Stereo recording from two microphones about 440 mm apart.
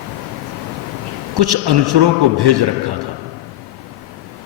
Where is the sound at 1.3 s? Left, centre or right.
Right.